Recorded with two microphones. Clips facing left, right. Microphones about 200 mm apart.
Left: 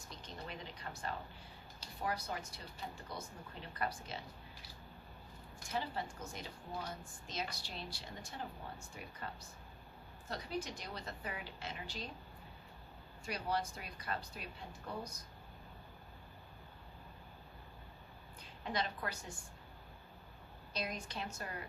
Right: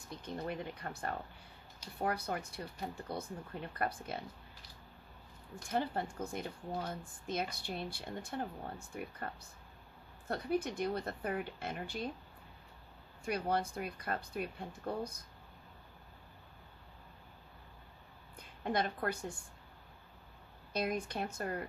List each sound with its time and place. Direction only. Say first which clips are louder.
0.1 s a woman's voice: right 8 dB; 55° right (ahead or behind)
5.7 s a woman's voice: right 5 dB; 55° right (ahead or behind)
13.2 s speech: right 4 dB; 55° right (ahead or behind)
18.6 s speech: right 5 dB; 55° right (ahead or behind)
20.7 s speech: right 7 dB; 55° right (ahead or behind)